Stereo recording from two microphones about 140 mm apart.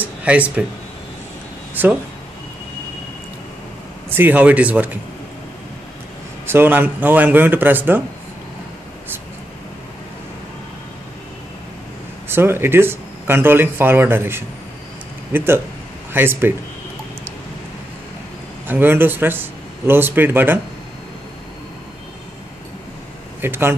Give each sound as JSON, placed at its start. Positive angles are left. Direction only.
{"t": 0.0, "sound": "speech", "side_deg": -10}
{"t": 1.8, "sound": "speech", "side_deg": -15}
{"t": 4.1, "sound": "speech", "side_deg": -15}
{"t": 6.4, "sound": "speech", "side_deg": -15}
{"t": 12.3, "sound": "speech", "side_deg": -15}
{"t": 18.7, "sound": "speech", "side_deg": -15}
{"t": 23.4, "sound": "speech", "side_deg": -15}